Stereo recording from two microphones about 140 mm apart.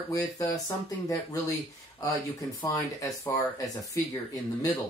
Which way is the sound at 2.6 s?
25° left (ahead or behind).